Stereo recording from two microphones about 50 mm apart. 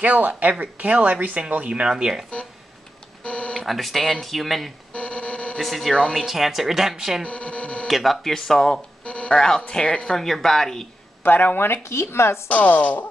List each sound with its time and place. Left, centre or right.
0.0 s speech: right
1.7 s speech: centre
3.3 s a sound: left
3.6 s speech: centre
4.9 s dog: left
5.6 s speech: centre
7.2 s speech: left
7.9 s speech: centre
9.0 s speech: left
10.1 s speech: centre
11.2 s speech: left
11.8 s speech: left
12.4 s speech: left